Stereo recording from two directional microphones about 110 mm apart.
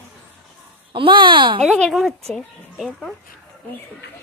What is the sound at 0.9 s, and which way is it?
Speech, 50° right (ahead or behind).